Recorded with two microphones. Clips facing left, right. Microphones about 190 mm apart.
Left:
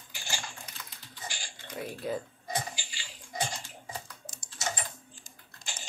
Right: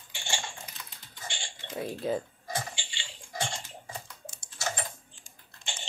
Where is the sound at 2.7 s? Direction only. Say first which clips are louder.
Right 1 dB; 25° right (ahead or behind).